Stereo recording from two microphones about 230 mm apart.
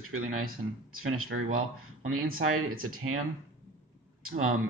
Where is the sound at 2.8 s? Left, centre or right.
Right.